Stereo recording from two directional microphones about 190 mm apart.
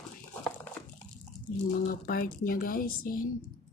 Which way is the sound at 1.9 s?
50° left (ahead or behind).